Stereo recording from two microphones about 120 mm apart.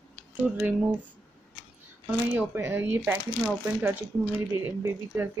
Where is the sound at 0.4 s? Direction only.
15° right (ahead or behind).